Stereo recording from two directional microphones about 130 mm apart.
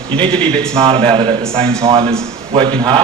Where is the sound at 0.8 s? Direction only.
45° right (ahead or behind).